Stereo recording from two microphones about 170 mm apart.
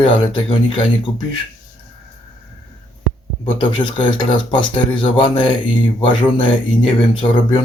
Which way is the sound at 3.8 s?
30° left (ahead or behind).